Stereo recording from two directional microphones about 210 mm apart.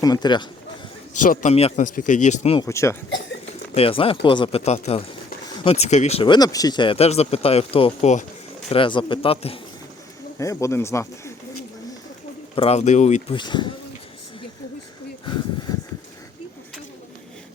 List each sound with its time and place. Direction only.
0.0 s speech: 20° left (ahead or behind)
1.1 s speech: 40° left (ahead or behind)
2.6 s speech: 15° left (ahead or behind)
3.8 s speech: 25° left (ahead or behind)
10.3 s speech: 15° left (ahead or behind)
12.5 s speech: 30° left (ahead or behind)